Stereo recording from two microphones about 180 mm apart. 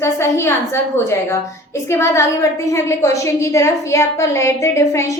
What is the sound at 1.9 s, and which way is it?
A woman's voice, 15° left (ahead or behind).